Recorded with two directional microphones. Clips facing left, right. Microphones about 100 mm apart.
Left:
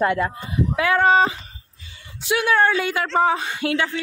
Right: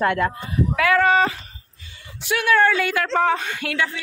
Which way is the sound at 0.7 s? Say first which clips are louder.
Left 1 dB; 25° left (ahead or behind).